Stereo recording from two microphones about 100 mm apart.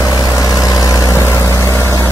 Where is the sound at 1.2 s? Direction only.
25° left (ahead or behind).